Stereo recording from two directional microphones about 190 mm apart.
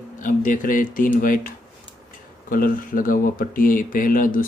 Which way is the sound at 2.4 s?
45° left (ahead or behind).